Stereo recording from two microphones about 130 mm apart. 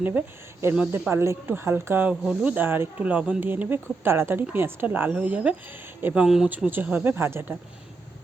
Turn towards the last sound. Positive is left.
turn(degrees=-20)  # may be behind; listen again after turning